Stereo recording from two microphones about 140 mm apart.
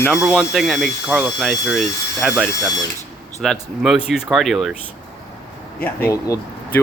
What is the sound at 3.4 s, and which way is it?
Speech, centre (ahead or behind).